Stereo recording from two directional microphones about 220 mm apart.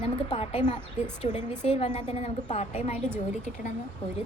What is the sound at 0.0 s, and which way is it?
A woman's voice, 25° left (ahead or behind).